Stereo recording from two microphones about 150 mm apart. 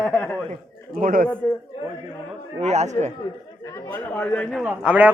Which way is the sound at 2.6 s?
50° right (ahead or behind).